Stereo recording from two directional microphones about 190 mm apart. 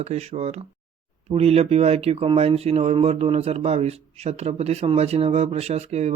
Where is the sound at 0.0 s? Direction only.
35° right (ahead or behind).